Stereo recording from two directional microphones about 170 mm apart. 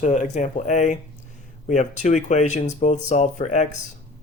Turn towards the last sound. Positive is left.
turn(degrees=45)  # may be behind; listen again after turning